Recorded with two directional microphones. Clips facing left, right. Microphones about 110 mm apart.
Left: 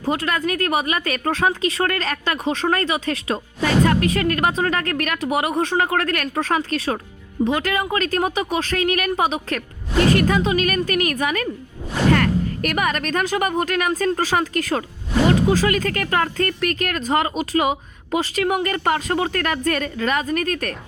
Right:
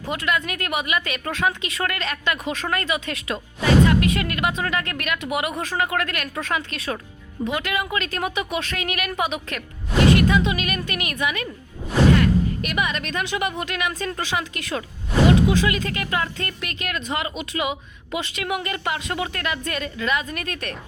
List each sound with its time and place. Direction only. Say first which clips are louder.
0.0 s speech: left 3 dB; 30° left (ahead or behind)
12.1 s speech: even; 50° left (ahead or behind)